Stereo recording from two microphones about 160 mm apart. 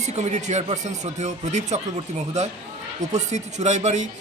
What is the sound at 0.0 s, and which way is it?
A man's voice, 45° right (ahead or behind).